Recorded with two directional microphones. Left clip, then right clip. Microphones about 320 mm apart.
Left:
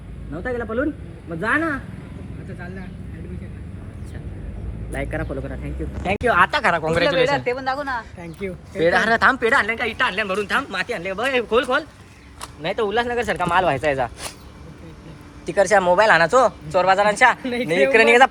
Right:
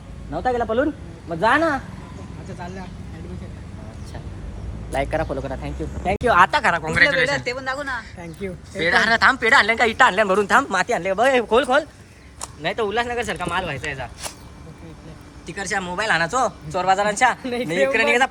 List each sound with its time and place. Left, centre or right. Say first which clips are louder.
0.4 s speech: right 4 dB; centre
4.9 s speech: right 5 dB; centre
7.3 s speech: left 2 dB; centre
8.2 s speech: left 1 dB; centre
15.4 s speech: left 10 dB; centre
17.4 s a woman's voice: left 1 dB; right
17.9 s speech: left 7 dB; centre